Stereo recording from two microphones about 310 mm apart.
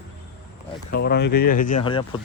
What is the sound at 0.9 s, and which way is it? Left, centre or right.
Speech, left.